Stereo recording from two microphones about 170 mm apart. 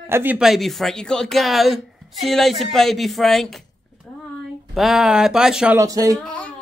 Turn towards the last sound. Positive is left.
turn(degrees=5)  # may be behind; listen again after turning